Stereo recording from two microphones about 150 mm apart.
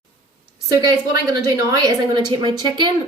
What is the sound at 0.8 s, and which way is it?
A woman's voice, 25° right (ahead or behind).